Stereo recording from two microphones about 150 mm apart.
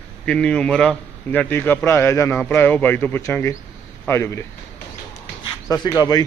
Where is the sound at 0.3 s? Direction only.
5° left (ahead or behind).